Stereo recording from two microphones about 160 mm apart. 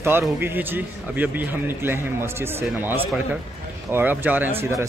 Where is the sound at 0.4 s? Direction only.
10° right (ahead or behind).